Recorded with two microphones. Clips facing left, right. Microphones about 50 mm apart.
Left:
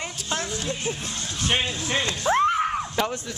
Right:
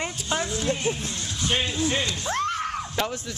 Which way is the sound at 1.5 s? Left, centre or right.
Left.